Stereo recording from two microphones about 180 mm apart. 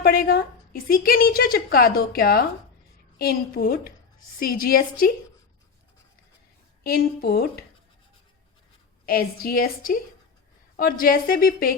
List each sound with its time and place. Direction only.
0.0 s a woman's voice: 60° left (ahead or behind)
6.8 s a woman's voice: 55° left (ahead or behind)
9.0 s a woman's voice: 55° left (ahead or behind)